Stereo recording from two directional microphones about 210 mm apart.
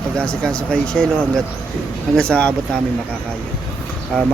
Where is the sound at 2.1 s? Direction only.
5° left (ahead or behind).